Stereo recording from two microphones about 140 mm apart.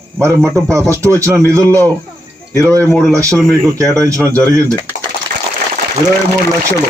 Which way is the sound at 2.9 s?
5° left (ahead or behind).